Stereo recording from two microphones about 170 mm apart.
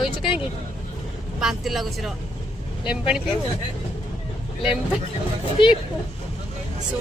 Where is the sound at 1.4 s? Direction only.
Centre (ahead or behind).